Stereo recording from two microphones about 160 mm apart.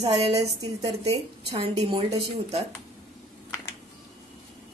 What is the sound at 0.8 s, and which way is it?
A woman's voice, 40° right (ahead or behind).